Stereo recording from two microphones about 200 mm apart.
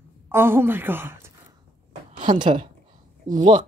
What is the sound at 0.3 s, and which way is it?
Speech, 10° right (ahead or behind).